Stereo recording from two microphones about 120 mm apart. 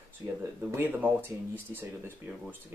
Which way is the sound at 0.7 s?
15° right (ahead or behind).